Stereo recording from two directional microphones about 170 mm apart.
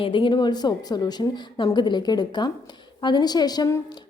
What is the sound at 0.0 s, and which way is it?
A woman's voice, 30° left (ahead or behind).